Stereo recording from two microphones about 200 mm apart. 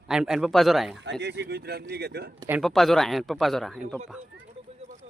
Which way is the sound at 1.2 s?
60° right (ahead or behind).